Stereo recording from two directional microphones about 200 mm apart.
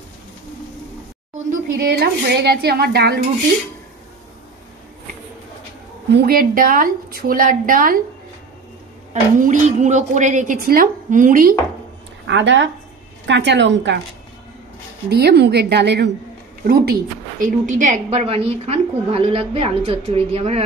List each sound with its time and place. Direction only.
1.8 s speech: 55° right (ahead or behind)
6.1 s speech: 50° right (ahead or behind)
9.1 s a woman's voice: 35° right (ahead or behind)
12.3 s a woman's voice: 65° right (ahead or behind)
15.0 s a woman's voice: 55° right (ahead or behind); by 20.6 s 30° right (ahead or behind)